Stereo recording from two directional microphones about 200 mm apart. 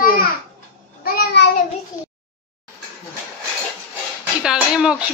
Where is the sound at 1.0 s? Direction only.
50° left (ahead or behind).